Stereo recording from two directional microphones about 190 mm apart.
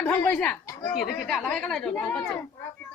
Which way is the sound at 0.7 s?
15° left (ahead or behind).